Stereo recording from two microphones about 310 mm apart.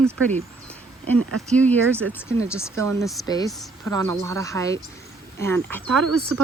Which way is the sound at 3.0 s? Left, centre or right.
Centre.